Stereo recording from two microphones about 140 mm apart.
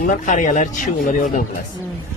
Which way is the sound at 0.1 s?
65° left (ahead or behind).